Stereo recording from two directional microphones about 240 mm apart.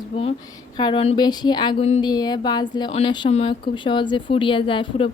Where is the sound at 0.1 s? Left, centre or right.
Centre.